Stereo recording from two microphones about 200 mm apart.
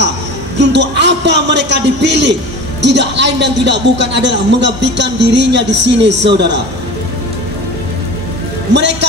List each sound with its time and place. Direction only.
0.6 s a man's voice: 60° right (ahead or behind)